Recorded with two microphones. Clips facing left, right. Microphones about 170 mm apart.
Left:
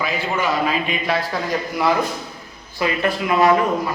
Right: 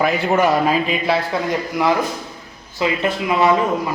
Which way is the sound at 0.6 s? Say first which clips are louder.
Right 4 dB; 30° right (ahead or behind).